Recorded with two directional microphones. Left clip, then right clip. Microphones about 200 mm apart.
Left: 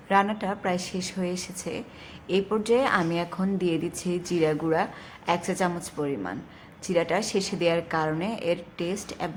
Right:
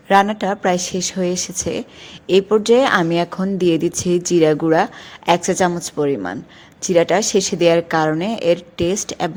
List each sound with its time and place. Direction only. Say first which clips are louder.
0.1 s a woman's voice: right 9 dB; 35° right (ahead or behind)